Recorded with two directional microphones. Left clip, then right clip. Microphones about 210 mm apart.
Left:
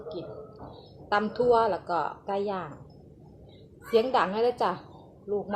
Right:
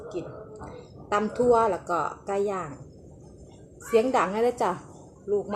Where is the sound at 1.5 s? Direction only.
10° right (ahead or behind).